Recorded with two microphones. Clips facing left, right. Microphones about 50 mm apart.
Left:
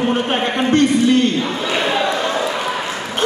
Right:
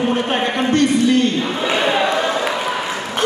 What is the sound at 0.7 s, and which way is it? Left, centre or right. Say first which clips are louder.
Speech: left 2 dB; left.